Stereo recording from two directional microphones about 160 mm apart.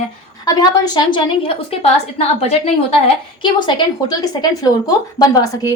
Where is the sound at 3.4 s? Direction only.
30° left (ahead or behind).